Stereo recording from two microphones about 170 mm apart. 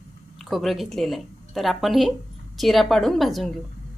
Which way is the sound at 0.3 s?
Centre (ahead or behind).